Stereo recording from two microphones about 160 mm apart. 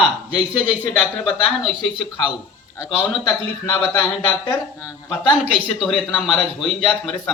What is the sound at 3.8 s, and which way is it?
Speech, 10° left (ahead or behind).